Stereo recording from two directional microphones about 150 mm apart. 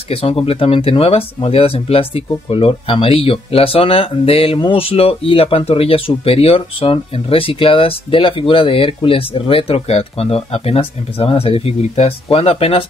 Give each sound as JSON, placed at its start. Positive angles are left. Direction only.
{"t": 0.1, "sound": "speech", "side_deg": 40}